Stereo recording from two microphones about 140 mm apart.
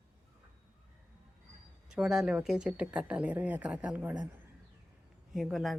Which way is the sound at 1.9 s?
5° right (ahead or behind).